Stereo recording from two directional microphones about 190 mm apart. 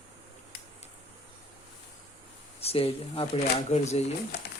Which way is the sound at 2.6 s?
30° left (ahead or behind).